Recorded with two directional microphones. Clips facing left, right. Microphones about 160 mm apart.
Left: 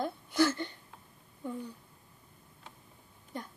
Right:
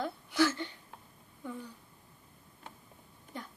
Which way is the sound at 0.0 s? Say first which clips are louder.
Left 1 dB; 45° left (ahead or behind).